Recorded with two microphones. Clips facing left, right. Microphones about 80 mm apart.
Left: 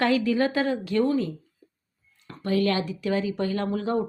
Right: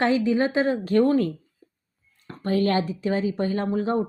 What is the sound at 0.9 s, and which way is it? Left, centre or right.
Speech, right.